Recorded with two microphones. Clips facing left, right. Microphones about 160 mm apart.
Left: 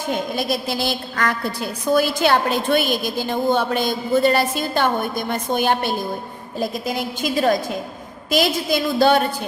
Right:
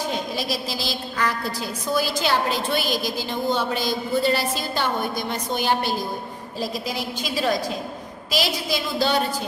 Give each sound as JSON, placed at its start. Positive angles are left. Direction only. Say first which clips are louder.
{"t": 0.1, "sound": "a woman's voice", "louder": "left 4 dB", "side_deg": 55}